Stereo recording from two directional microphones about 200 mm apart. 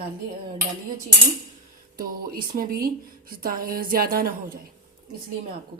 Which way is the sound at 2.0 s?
50° right (ahead or behind).